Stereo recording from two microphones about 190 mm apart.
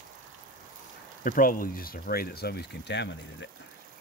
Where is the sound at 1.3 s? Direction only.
45° left (ahead or behind); by 3.5 s 65° left (ahead or behind).